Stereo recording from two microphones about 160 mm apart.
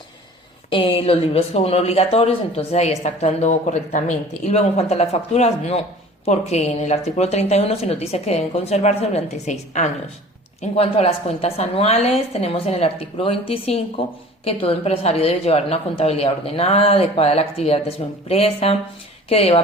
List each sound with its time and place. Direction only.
0.7 s speech: 35° left (ahead or behind)